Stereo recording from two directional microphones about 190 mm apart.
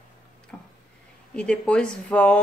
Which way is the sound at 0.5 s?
5° left (ahead or behind).